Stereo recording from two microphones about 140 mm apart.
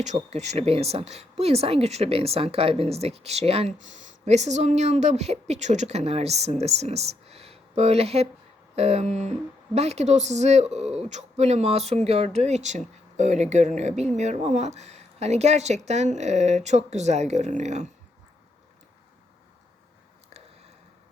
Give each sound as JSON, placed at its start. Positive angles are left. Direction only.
{"t": 0.0, "sound": "a woman's voice", "side_deg": -55}
{"t": 3.8, "sound": "a woman's voice", "side_deg": -60}